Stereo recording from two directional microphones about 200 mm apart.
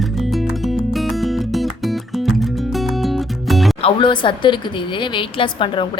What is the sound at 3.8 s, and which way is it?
Speech, 25° left (ahead or behind).